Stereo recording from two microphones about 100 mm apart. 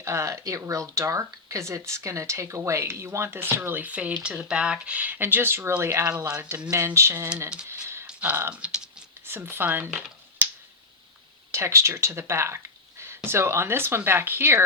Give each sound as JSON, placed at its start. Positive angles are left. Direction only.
{"t": 0.0, "sound": "speech", "side_deg": -30}
{"t": 6.2, "sound": "speech", "side_deg": -10}
{"t": 6.7, "sound": "speech", "side_deg": -30}
{"t": 7.7, "sound": "a sound", "side_deg": -25}
{"t": 8.0, "sound": "a sound", "side_deg": -15}
{"t": 8.6, "sound": "typing", "side_deg": -10}
{"t": 9.2, "sound": "speech", "side_deg": -25}
{"t": 10.4, "sound": "finger snapping", "side_deg": -20}
{"t": 11.5, "sound": "speech", "side_deg": -30}